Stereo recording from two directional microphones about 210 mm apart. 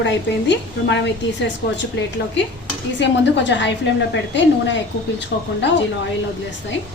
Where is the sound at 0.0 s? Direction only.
55° left (ahead or behind).